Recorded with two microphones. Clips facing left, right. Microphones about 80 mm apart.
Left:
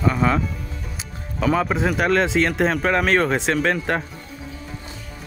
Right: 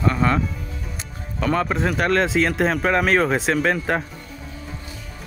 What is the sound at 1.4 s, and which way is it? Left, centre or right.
Speech, centre.